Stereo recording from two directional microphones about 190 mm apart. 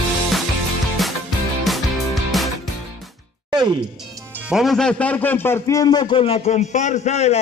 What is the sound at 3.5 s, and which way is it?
Music, 25° right (ahead or behind).